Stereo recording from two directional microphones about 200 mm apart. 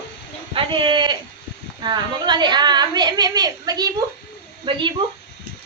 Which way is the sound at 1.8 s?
20° right (ahead or behind).